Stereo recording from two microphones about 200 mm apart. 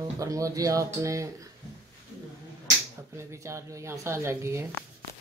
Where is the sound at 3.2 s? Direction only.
15° right (ahead or behind).